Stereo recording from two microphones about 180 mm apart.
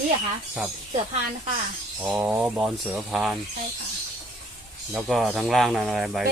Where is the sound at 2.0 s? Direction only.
10° right (ahead or behind).